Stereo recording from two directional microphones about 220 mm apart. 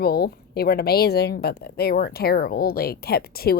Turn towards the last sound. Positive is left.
turn(degrees=45)  # may be behind; listen again after turning